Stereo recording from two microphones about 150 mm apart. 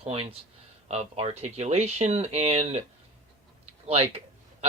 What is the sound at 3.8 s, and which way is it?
Speech, 40° right (ahead or behind).